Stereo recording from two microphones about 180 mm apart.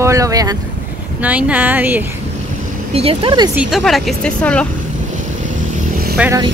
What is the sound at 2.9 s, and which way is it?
Speech, 35° right (ahead or behind).